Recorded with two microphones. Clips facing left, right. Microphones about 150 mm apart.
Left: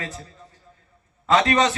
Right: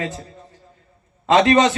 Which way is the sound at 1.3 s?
30° right (ahead or behind).